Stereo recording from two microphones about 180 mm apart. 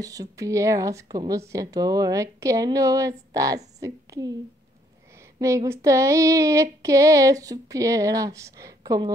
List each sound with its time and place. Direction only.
0.0 s a woman's voice: 20° right (ahead or behind)
5.1 s female singing: 15° right (ahead or behind)